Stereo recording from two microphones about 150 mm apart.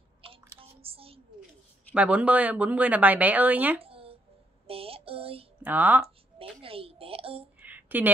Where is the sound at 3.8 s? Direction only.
40° right (ahead or behind).